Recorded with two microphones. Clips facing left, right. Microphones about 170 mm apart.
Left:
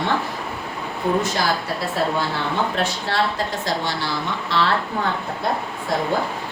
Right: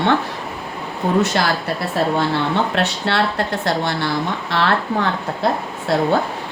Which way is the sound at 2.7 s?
70° right (ahead or behind).